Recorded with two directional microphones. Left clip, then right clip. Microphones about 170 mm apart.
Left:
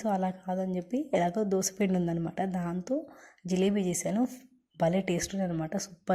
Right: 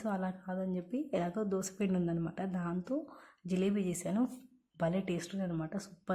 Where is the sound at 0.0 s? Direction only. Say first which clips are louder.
Left 8 dB; 15° left (ahead or behind).